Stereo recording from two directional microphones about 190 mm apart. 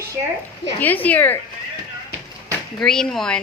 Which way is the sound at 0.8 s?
10° left (ahead or behind).